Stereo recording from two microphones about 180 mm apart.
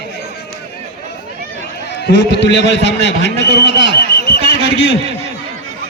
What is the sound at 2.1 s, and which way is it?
A man's voice, 75° left (ahead or behind).